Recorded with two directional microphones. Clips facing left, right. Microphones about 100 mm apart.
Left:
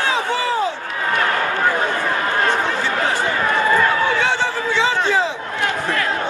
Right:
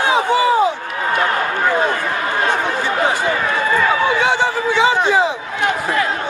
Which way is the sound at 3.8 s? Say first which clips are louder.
Right 2 dB; 15° right (ahead or behind).